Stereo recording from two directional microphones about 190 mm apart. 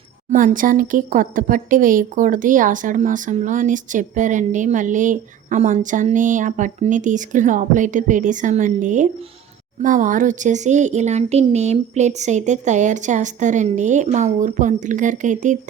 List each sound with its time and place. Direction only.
0.3 s speech: 45° right (ahead or behind)